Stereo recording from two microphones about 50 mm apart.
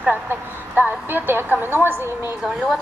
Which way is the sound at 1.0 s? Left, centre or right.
Right.